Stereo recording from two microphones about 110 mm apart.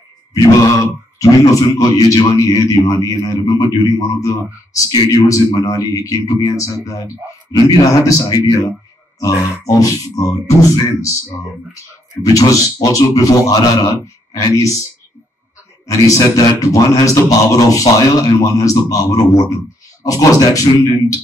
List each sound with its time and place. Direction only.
0.3 s speech: 30° left (ahead or behind)
16.1 s speech: 30° left (ahead or behind)